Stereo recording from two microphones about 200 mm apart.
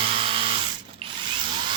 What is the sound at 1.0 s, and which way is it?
Drill, 25° right (ahead or behind).